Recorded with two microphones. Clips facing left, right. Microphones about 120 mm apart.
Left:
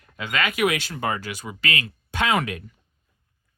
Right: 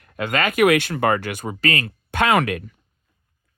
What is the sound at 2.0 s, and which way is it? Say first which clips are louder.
Speech: right 5 dB; 60° right (ahead or behind).